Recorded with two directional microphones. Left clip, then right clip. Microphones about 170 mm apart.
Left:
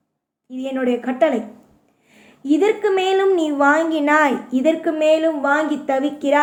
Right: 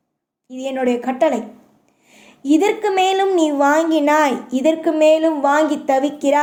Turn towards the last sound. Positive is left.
turn(degrees=-30)  # may be behind; listen again after turning